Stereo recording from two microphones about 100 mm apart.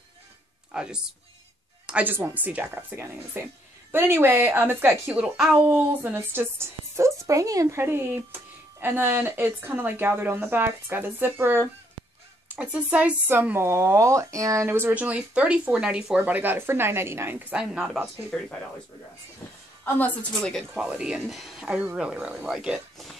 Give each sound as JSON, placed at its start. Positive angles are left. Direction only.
{"t": 0.7, "sound": "speech", "side_deg": -10}
{"t": 17.6, "sound": "speech", "side_deg": -5}
{"t": 18.3, "sound": "a woman's voice", "side_deg": 10}
{"t": 19.8, "sound": "a woman's voice", "side_deg": 15}
{"t": 20.7, "sound": "speech", "side_deg": -5}